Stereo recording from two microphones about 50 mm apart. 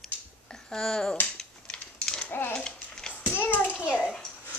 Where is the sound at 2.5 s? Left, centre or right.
Centre.